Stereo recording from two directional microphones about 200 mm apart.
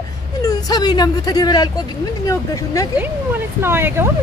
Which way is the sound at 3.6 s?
10° right (ahead or behind).